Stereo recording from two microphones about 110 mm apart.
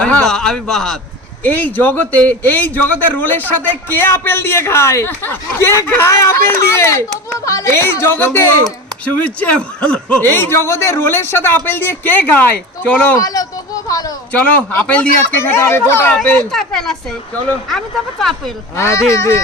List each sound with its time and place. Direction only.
0.0 s a man's voice: 5° left (ahead or behind)
1.5 s a man's voice: 15° left (ahead or behind)
10.2 s speech: 20° left (ahead or behind)
13.1 s a child's voice: 35° left (ahead or behind)
14.3 s a man's voice: 15° left (ahead or behind)
16.5 s speech: 5° left (ahead or behind)
18.8 s speech: 25° left (ahead or behind)